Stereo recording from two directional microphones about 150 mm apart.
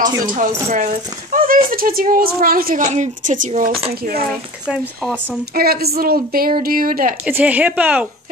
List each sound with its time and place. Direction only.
0.0 s speech: 20° right (ahead or behind)
0.7 s a woman's voice: 55° right (ahead or behind); by 4.2 s 85° right
4.6 s speech: 5° right (ahead or behind)
5.5 s a woman's voice: 90° right; by 7.2 s 70° right (ahead or behind)
7.2 s speech: 10° right (ahead or behind)